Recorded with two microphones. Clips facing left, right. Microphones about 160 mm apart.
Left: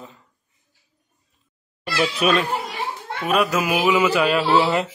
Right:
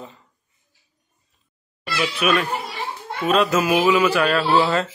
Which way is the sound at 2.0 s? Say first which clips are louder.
Left 2 dB; 35° left (ahead or behind).